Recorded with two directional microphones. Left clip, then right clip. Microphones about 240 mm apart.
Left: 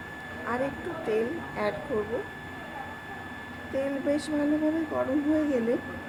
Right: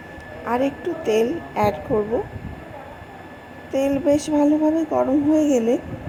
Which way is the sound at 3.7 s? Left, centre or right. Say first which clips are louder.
Right 9 dB; right.